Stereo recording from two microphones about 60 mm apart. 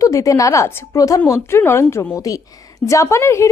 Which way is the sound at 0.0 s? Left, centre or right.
Left.